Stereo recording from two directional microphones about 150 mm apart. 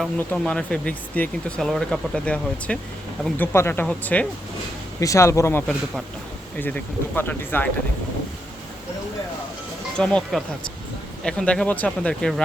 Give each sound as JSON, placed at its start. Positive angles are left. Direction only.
{"t": 0.2, "sound": "speech", "side_deg": 5}
{"t": 4.9, "sound": "speech", "side_deg": 20}
{"t": 10.0, "sound": "speech", "side_deg": 5}